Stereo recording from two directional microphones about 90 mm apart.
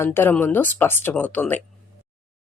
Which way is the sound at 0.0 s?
25° left (ahead or behind).